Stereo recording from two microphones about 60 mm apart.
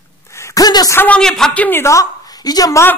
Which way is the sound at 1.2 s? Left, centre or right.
Centre.